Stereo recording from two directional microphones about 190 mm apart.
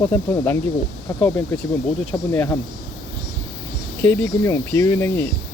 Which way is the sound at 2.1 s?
10° left (ahead or behind).